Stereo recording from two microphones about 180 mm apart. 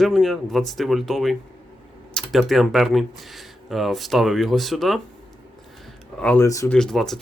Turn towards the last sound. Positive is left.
turn(degrees=0)  # may be behind; listen again after turning